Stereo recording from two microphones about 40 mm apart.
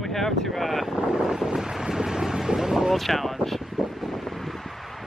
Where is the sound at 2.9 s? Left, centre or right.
Centre.